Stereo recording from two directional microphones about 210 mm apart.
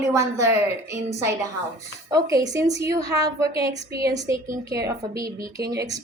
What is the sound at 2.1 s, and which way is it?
A woman's voice, 15° right (ahead or behind).